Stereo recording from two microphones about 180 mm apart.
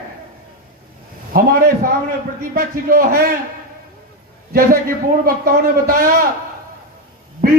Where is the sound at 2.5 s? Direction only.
55° right (ahead or behind).